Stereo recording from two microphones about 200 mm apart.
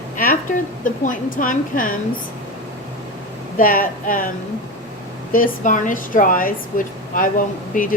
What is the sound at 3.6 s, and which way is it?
A woman's voice, 45° left (ahead or behind).